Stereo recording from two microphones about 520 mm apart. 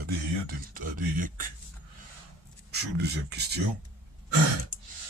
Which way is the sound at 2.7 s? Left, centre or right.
Centre.